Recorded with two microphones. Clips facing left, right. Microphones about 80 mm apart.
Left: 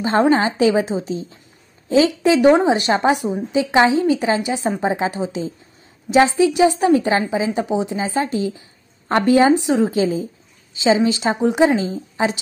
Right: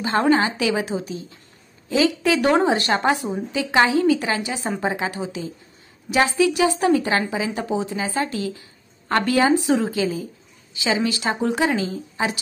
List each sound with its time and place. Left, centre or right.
0.0 s a woman's voice: left